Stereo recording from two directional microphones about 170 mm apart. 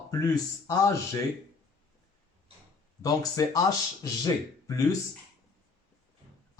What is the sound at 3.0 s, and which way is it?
Speech, 20° left (ahead or behind).